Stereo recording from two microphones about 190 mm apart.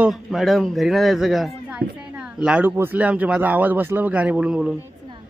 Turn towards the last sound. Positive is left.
turn(degrees=-5)  # may be behind; listen again after turning